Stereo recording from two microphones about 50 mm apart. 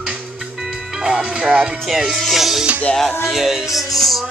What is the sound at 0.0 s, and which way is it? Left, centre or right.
Music, centre.